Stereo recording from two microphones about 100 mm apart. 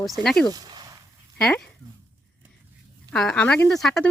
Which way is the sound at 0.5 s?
45° right (ahead or behind).